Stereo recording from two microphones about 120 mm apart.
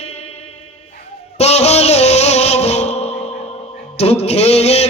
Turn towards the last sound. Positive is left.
turn(degrees=60)  # may be behind; listen again after turning